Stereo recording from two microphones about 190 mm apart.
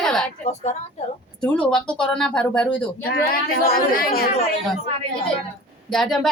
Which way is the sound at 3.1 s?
50° left (ahead or behind).